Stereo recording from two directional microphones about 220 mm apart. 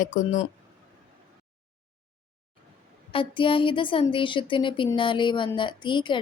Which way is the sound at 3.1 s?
25° left (ahead or behind).